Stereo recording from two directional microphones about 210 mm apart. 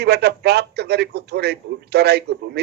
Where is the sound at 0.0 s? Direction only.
50° right (ahead or behind).